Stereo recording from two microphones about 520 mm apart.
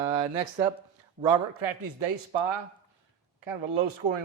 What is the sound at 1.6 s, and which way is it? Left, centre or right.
Speech, right.